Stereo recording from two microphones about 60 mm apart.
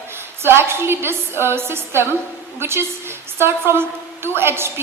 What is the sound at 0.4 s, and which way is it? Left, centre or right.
A woman's voice, right.